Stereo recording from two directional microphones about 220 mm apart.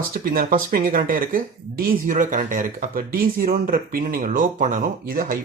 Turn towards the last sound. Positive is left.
turn(degrees=-40)  # may be behind; listen again after turning